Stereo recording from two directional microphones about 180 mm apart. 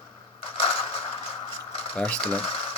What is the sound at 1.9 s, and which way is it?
Speech, 5° left (ahead or behind).